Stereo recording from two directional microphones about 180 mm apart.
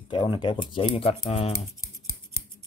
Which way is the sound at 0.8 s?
35° left (ahead or behind).